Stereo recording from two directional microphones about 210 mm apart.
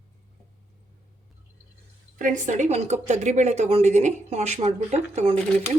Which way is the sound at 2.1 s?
40° right (ahead or behind).